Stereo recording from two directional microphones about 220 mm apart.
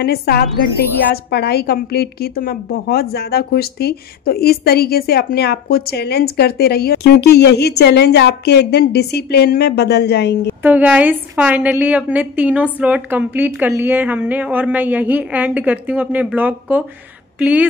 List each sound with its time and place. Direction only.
0.0 s a woman's voice: 45° left (ahead or behind)
10.6 s a woman's voice: 5° right (ahead or behind)